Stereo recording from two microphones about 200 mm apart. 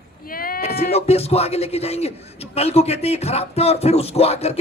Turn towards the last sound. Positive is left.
turn(degrees=30)  # may be behind; listen again after turning